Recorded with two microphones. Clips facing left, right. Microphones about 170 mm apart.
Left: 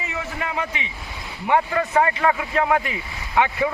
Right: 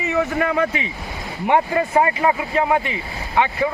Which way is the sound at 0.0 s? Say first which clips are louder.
Right 9 dB; 65° right (ahead or behind).